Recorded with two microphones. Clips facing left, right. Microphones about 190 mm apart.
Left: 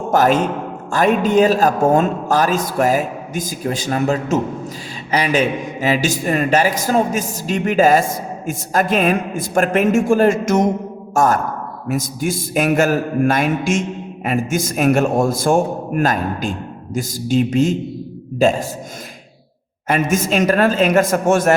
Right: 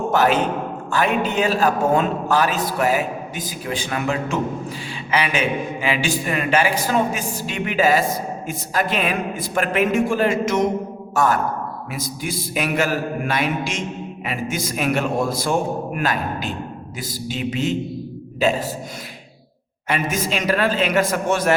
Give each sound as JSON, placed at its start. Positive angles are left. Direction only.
{"t": 0.1, "sound": "a man's voice", "side_deg": 45}
{"t": 19.9, "sound": "a man's voice", "side_deg": 45}